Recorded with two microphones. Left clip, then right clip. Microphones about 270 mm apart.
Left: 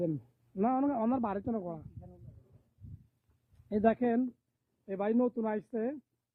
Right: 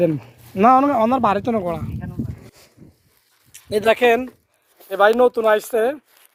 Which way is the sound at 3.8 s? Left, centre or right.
Centre.